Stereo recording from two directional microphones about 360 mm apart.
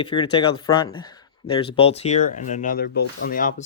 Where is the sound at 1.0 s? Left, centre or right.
Centre.